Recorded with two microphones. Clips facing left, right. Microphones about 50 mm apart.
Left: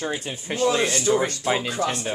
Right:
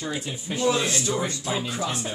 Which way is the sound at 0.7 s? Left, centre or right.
Left.